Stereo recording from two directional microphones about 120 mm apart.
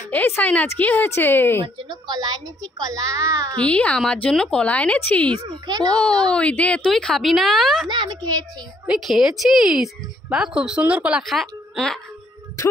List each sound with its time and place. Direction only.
0.1 s a woman's voice: 15° left (ahead or behind)
1.6 s a woman's voice: 40° right (ahead or behind)
3.5 s a woman's voice: 10° left (ahead or behind)
5.3 s a woman's voice: 35° right (ahead or behind)
5.9 s a woman's voice: 5° left (ahead or behind)
7.9 s a woman's voice: 40° right (ahead or behind)
8.8 s speech: 5° right (ahead or behind)